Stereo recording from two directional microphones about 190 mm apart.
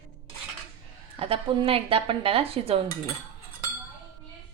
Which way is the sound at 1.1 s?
30° right (ahead or behind).